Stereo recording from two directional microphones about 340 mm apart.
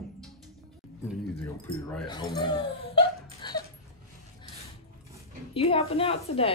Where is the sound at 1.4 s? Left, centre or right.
Centre.